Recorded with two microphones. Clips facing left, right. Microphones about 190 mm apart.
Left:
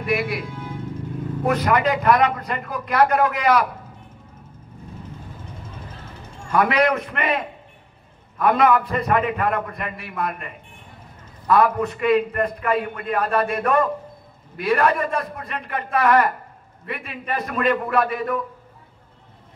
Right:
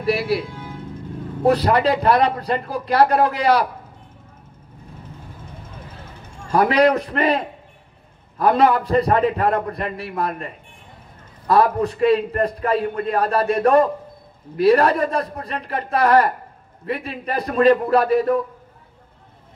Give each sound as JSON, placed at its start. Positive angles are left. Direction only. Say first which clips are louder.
{"t": 0.0, "sound": "a man's voice", "louder": "right 3 dB", "side_deg": -35}
{"t": 1.4, "sound": "a man's voice", "louder": "right 4 dB", "side_deg": -35}
{"t": 6.5, "sound": "a man's voice", "louder": "right 3 dB", "side_deg": -35}